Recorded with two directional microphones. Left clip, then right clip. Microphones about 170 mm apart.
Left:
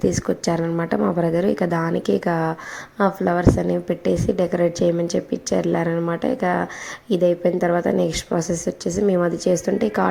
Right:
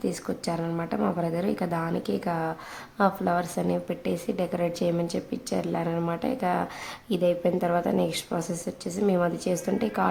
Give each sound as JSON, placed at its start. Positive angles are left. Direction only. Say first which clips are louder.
{"t": 0.2, "sound": "a woman's voice", "louder": "left 9 dB", "side_deg": 25}